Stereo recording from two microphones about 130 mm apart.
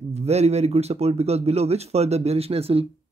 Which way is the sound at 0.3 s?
55° right (ahead or behind).